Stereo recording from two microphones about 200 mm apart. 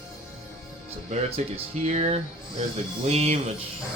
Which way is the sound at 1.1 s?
30° right (ahead or behind).